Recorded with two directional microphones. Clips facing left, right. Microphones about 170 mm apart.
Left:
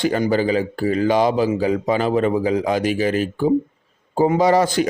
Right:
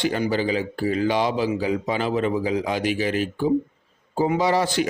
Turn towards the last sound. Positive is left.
turn(degrees=45)  # may be behind; listen again after turning